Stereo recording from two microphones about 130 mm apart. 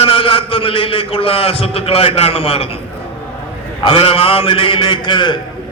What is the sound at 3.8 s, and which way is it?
A man's voice, 45° left (ahead or behind).